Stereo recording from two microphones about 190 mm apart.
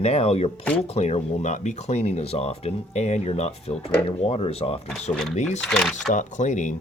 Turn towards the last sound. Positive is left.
turn(degrees=40)  # may be behind; listen again after turning